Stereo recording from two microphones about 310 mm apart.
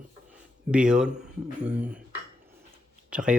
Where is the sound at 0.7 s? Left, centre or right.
Centre.